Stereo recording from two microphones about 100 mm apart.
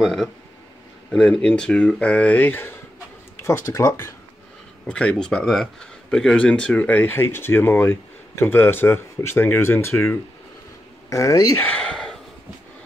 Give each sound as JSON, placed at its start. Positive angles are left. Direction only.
{"t": 0.0, "sound": "speech", "side_deg": 0}
{"t": 4.8, "sound": "speech", "side_deg": 10}
{"t": 11.5, "sound": "a sound", "side_deg": 15}